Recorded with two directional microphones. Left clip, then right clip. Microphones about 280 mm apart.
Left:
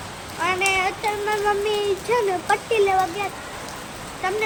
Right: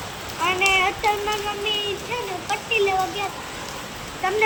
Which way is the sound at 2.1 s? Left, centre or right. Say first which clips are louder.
Left 12 dB; centre.